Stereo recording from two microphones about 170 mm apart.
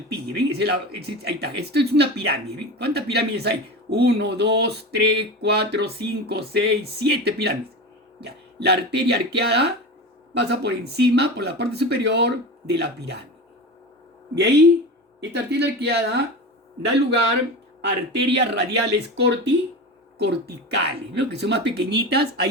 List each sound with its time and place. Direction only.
0.1 s speech: 75° right (ahead or behind)
14.3 s speech: 80° right
17.8 s speech: 90° right; by 22.4 s 70° right (ahead or behind)